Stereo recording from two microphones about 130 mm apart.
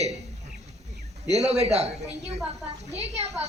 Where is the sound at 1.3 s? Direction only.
55° right (ahead or behind).